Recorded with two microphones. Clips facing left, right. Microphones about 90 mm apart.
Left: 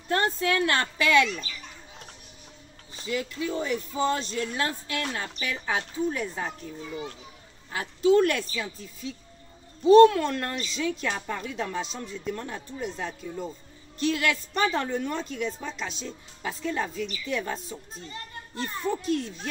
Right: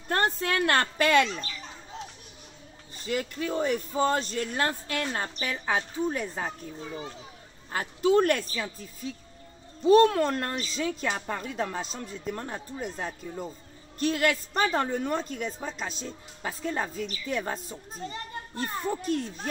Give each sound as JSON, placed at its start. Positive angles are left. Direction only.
{"t": 0.1, "sound": "speech", "side_deg": -45}
{"t": 3.1, "sound": "speech", "side_deg": -50}
{"t": 7.7, "sound": "a woman's voice", "side_deg": -45}